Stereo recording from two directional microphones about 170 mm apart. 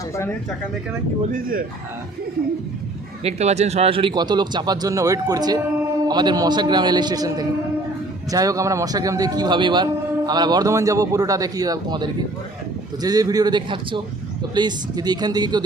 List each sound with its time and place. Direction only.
1.3 s speech: 55° right (ahead or behind)
3.2 s a man's voice: 40° right (ahead or behind); by 15.6 s 25° right (ahead or behind)